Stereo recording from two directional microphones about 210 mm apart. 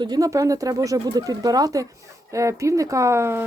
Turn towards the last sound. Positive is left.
turn(degrees=-10)  # may be behind; listen again after turning